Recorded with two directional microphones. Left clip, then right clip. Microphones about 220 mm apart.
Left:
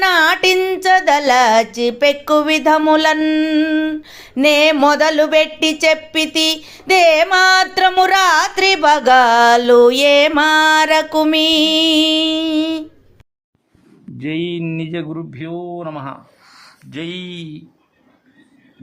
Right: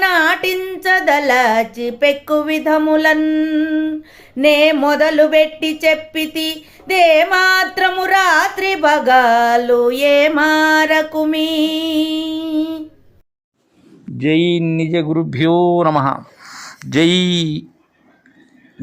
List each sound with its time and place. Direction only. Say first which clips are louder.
0.0 s female singing: left 1 dB; 10° left (ahead or behind)
14.2 s speech: right 7 dB; 10° right (ahead or behind)
15.3 s speech: right 13 dB; 40° right (ahead or behind)
15.9 s speech: right 12 dB; 30° right (ahead or behind)